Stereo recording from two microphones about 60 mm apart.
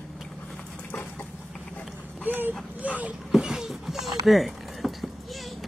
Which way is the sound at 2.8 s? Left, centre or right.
Right.